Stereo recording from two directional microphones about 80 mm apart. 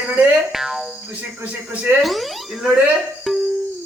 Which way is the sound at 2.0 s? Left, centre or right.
Centre.